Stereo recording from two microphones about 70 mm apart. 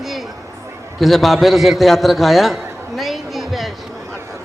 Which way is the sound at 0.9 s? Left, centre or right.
Centre.